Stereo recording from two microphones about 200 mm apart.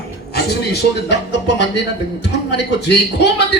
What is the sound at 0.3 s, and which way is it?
Speech, 55° left (ahead or behind).